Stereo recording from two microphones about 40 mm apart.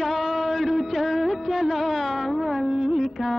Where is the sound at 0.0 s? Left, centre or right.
Centre.